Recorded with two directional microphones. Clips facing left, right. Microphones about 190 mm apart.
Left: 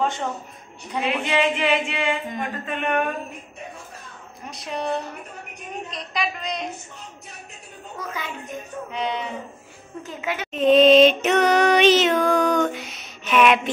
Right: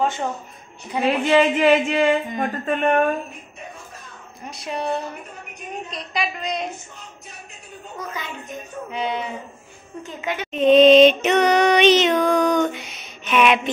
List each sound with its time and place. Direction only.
1.0 s speech: 40° right (ahead or behind)
4.5 s female singing: centre (ahead or behind)
8.9 s female singing: 5° right (ahead or behind)